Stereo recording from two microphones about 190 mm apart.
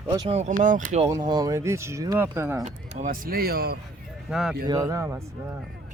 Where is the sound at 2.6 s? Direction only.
40° right (ahead or behind); by 3.7 s 55° right (ahead or behind).